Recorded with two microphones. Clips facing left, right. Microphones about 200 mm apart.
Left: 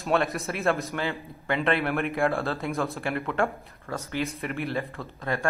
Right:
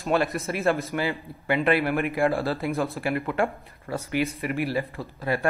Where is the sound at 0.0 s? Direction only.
Centre (ahead or behind).